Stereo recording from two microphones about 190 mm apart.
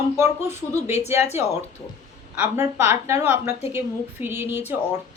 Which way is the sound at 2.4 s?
10° right (ahead or behind).